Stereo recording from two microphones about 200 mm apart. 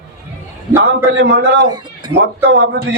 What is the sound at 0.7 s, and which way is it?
Speech, 65° right (ahead or behind).